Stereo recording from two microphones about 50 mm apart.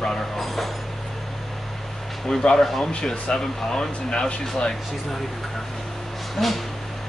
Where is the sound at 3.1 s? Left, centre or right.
Centre.